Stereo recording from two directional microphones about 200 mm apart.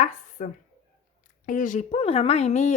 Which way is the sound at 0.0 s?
40° left (ahead or behind).